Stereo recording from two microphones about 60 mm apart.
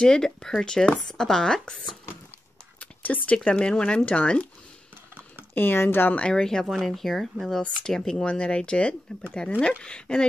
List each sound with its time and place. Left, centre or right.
0.0 s speech: centre
2.8 s whispering: left
3.4 s speech: centre
5.5 s speech: left
6.3 s speech: centre